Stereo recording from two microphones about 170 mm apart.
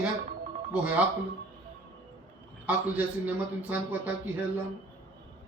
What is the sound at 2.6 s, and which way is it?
Speech, 10° right (ahead or behind).